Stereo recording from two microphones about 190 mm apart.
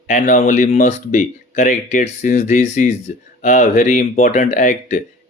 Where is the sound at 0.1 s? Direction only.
45° left (ahead or behind).